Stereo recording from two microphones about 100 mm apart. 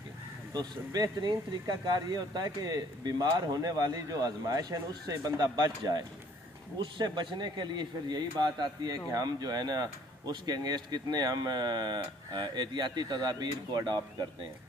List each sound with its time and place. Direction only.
0.5 s speech: 40° right (ahead or behind)
6.8 s a man's voice: 50° right (ahead or behind)